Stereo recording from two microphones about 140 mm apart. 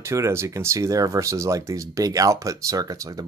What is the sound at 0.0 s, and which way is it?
Speech, 20° right (ahead or behind).